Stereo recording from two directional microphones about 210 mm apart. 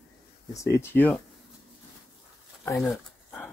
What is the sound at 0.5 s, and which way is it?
Speech, 15° left (ahead or behind).